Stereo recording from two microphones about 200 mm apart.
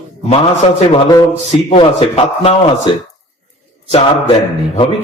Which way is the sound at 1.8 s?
25° left (ahead or behind).